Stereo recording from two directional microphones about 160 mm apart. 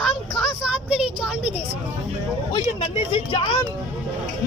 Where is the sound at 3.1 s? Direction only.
30° left (ahead or behind).